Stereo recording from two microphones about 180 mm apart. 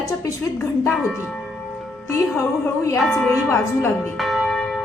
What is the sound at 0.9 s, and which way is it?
Music, centre (ahead or behind).